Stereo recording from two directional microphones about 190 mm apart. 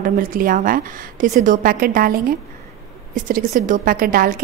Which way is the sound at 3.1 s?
45° right (ahead or behind).